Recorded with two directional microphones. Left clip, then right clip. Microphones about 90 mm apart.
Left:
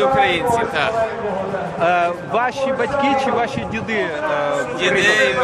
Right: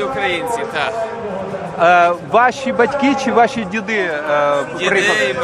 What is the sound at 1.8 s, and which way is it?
A man's voice, 40° right (ahead or behind).